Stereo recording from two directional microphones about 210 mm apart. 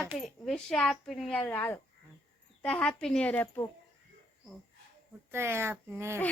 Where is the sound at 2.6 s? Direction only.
5° left (ahead or behind).